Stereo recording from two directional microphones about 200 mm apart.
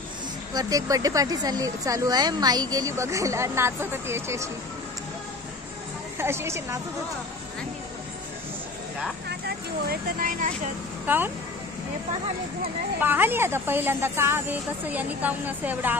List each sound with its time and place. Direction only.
0.6 s speech: 20° right (ahead or behind)
6.1 s a woman's voice: 15° right (ahead or behind)
9.8 s speech: 45° right (ahead or behind)
13.0 s speech: 10° right (ahead or behind)